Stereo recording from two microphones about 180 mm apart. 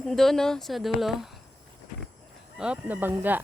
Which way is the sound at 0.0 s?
Centre (ahead or behind).